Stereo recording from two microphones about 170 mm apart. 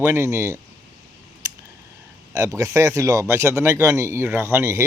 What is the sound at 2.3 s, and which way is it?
Speech, 20° right (ahead or behind).